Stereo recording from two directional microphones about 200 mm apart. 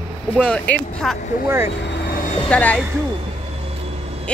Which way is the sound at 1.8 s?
55° left (ahead or behind).